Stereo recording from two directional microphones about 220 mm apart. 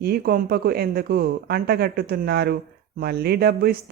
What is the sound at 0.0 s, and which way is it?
Speech, 45° right (ahead or behind).